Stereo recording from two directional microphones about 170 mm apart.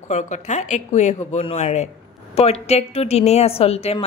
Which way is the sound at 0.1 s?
45° left (ahead or behind).